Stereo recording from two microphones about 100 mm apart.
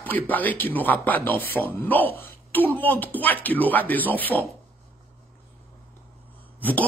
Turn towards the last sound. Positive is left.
turn(degrees=15)  # may be behind; listen again after turning